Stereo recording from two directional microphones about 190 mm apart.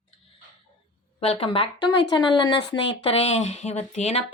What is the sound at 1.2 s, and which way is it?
A woman's voice, 30° left (ahead or behind).